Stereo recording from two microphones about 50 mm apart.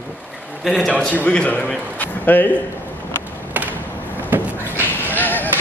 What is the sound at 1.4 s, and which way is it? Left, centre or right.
A man's voice, left.